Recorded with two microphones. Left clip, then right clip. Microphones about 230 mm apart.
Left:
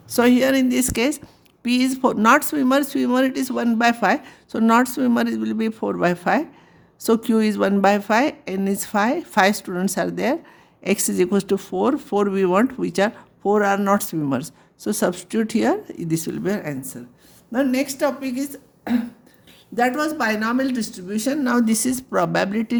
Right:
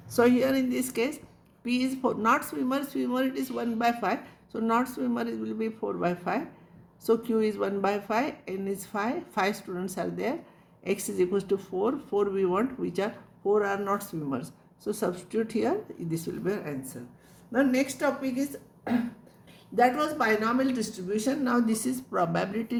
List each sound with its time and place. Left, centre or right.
0.1 s speech: left